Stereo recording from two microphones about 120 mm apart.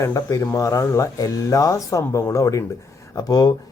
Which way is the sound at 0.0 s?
25° left (ahead or behind).